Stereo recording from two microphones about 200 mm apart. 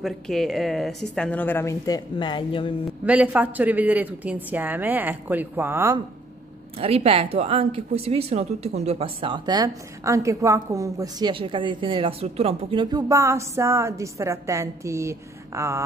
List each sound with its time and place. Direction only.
0.0 s speech: centre (ahead or behind); by 2.7 s 25° left (ahead or behind)
3.1 s speech: 5° right (ahead or behind)
6.8 s speech: 30° right (ahead or behind); by 15.8 s 15° right (ahead or behind)